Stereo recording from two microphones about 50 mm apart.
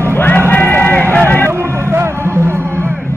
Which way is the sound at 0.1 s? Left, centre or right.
Left.